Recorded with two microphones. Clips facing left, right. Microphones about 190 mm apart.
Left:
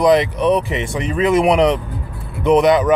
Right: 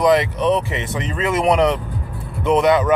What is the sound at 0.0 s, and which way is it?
Speech, 15° left (ahead or behind).